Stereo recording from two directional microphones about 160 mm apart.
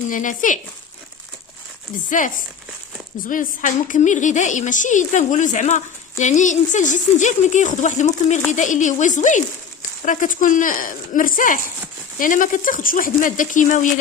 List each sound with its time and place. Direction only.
0.1 s a woman's voice: 55° left (ahead or behind)
2.0 s a woman's voice: 55° left (ahead or behind)